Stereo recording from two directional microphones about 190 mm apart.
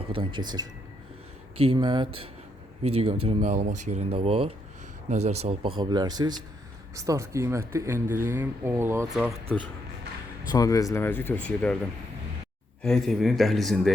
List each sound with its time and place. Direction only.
0.1 s speech: 25° right (ahead or behind)
9.1 s speech: centre (ahead or behind)
10.5 s speech: 20° left (ahead or behind)
12.8 s speech: centre (ahead or behind)